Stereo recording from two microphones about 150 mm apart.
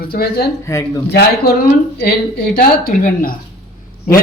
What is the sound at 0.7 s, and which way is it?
Speech, 20° left (ahead or behind).